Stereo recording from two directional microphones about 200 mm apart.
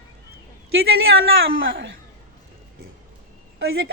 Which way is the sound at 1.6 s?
70° right (ahead or behind).